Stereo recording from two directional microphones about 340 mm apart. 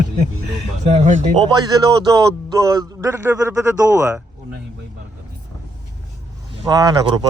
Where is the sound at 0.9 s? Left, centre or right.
Centre.